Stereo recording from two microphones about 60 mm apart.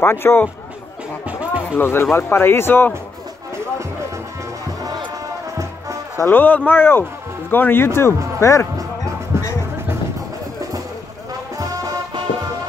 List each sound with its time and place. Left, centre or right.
0.0 s speech: left
1.2 s music: right
1.8 s speech: left
6.2 s speech: left
9.3 s music: right
11.5 s music: right